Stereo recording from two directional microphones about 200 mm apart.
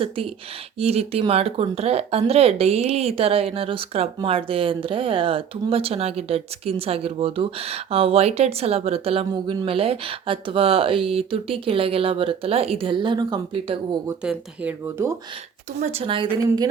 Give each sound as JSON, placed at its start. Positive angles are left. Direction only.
{"t": 0.8, "sound": "speech", "side_deg": -30}
{"t": 14.3, "sound": "speech", "side_deg": -10}
{"t": 15.8, "sound": "speech", "side_deg": -30}